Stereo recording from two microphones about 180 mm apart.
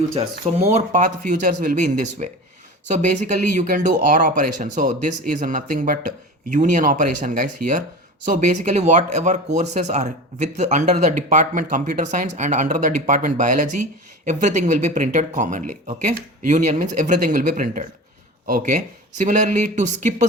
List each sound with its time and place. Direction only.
0.1 s speech: 40° right (ahead or behind)